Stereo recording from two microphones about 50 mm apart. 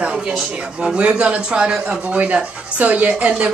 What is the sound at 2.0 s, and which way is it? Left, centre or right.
Speech, right.